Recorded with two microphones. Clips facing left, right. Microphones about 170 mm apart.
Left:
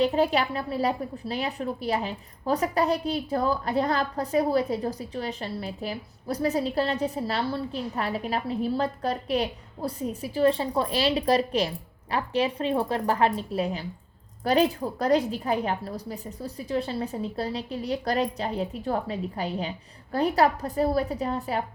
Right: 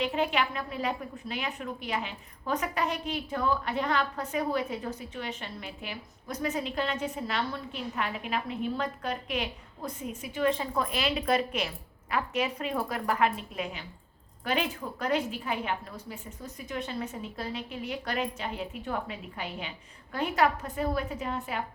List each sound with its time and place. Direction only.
0.0 s a woman's voice: 35° left (ahead or behind)